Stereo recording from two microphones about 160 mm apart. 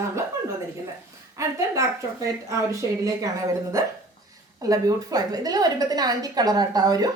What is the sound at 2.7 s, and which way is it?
Speech, 20° right (ahead or behind).